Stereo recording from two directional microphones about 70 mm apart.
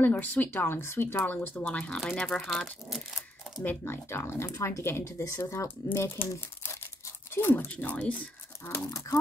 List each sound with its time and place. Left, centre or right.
0.0 s speech: left
2.0 s speech: centre
3.6 s speech: left
4.6 s speech: left
5.4 s speech: left
8.6 s speech: left